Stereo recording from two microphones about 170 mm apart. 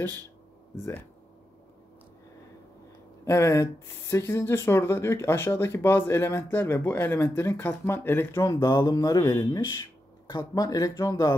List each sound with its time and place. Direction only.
3.3 s speech: 15° left (ahead or behind)